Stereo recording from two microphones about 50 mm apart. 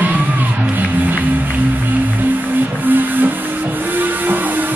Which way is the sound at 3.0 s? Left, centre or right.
Right.